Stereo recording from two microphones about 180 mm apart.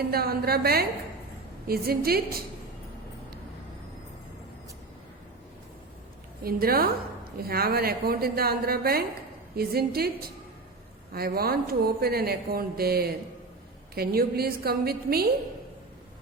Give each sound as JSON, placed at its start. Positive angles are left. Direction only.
{"t": 0.1, "sound": "speech", "side_deg": -60}
{"t": 6.4, "sound": "speech", "side_deg": -55}